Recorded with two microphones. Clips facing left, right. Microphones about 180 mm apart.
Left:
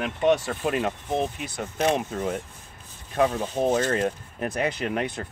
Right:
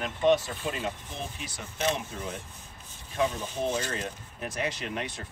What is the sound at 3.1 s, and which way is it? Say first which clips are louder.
Speech: left 6 dB; 60° left (ahead or behind).